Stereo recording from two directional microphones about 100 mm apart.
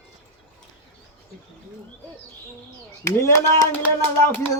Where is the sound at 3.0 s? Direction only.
35° left (ahead or behind).